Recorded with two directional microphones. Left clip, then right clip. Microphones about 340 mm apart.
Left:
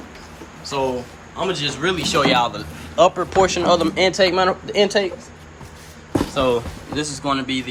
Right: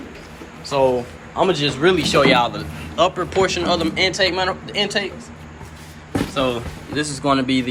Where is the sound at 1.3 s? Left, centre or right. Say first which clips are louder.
Right 4 dB; centre; by 5.1 s left.